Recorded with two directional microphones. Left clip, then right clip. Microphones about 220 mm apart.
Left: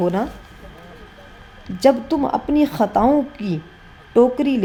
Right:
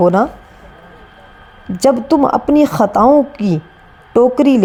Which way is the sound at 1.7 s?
25° right (ahead or behind).